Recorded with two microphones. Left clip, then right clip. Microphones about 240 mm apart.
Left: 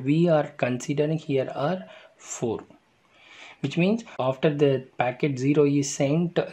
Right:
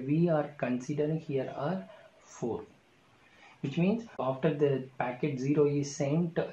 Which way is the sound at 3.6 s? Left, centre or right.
Left.